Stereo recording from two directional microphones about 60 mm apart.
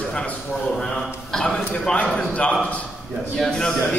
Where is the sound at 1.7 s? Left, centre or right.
Left.